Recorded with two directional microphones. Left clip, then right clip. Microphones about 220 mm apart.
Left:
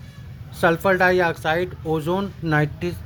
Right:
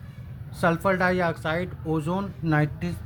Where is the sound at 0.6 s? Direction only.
30° left (ahead or behind).